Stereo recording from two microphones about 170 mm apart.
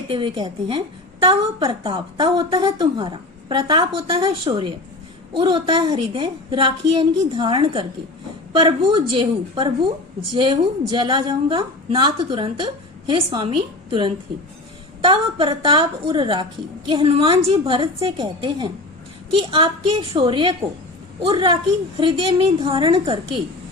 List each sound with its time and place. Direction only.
0.1 s a woman's voice: 30° right (ahead or behind)